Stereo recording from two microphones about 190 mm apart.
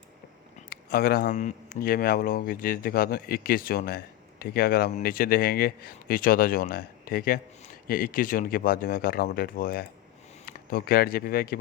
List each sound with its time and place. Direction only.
0.7 s speech: 55° left (ahead or behind)